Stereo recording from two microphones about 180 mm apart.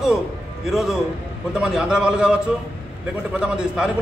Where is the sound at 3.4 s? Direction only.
5° right (ahead or behind).